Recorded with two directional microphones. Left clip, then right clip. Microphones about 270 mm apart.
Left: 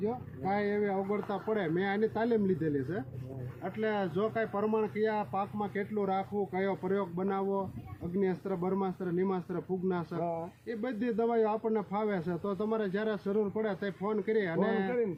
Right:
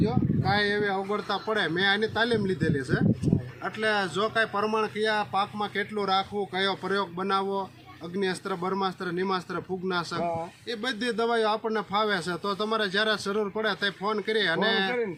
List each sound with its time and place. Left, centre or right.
0.0 s a man's voice: centre
10.2 s speech: right
10.7 s a man's voice: centre